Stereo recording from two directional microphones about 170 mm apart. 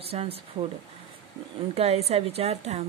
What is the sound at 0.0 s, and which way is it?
Speech, 35° right (ahead or behind).